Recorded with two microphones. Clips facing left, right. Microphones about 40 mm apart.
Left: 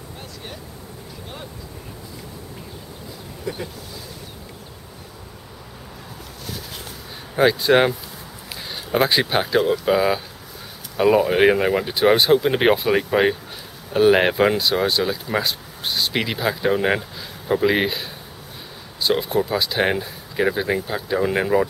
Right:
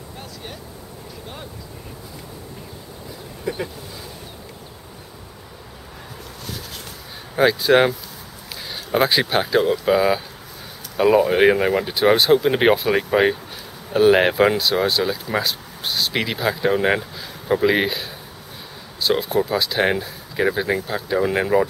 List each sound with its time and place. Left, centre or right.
3.5 s vehicle: centre
7.3 s speech: centre